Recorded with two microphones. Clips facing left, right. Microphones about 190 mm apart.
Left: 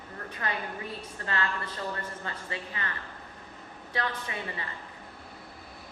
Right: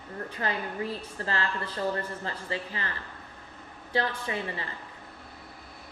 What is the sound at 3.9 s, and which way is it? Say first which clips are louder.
Speech: right 4 dB; 30° right (ahead or behind).